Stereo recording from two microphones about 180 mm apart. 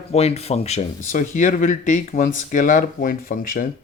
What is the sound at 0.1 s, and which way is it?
Speech, 35° left (ahead or behind).